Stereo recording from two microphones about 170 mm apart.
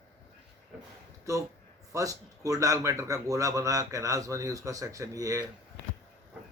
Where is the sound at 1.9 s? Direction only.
20° right (ahead or behind).